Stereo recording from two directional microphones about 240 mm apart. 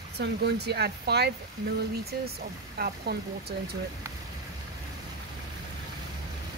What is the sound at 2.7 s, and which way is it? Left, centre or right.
Speech, right.